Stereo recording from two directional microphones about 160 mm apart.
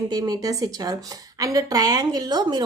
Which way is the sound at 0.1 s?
25° right (ahead or behind).